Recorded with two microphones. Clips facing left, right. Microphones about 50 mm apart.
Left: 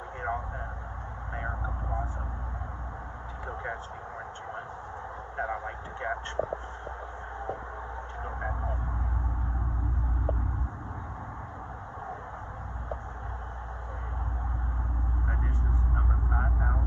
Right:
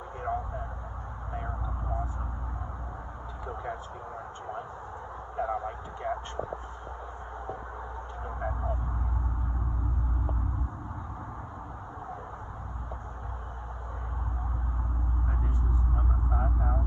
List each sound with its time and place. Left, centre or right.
0.2 s vehicle: left
5.4 s vehicle: left
8.4 s vehicle: left